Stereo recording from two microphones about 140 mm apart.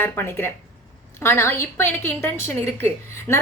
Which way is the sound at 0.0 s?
15° left (ahead or behind).